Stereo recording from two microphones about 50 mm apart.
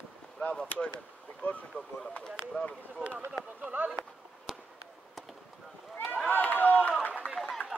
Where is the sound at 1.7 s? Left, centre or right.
Left.